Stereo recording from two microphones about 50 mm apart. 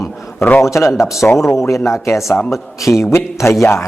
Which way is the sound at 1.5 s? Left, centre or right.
Left.